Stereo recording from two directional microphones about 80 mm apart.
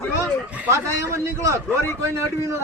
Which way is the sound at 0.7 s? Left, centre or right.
Right.